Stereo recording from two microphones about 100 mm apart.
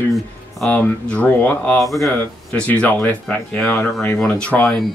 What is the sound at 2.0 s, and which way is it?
Speech, 15° left (ahead or behind).